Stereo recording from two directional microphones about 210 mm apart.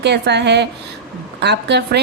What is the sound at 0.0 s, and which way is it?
A woman's voice, 55° right (ahead or behind).